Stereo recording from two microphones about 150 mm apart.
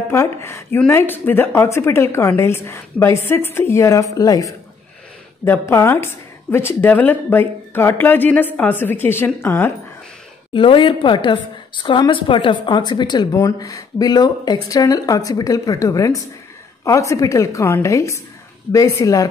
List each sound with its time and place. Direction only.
0.1 s a woman's voice: 15° left (ahead or behind)
10.5 s a woman's voice: 35° left (ahead or behind)